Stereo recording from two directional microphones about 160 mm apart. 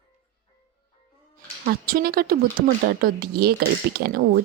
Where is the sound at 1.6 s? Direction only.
65° right (ahead or behind).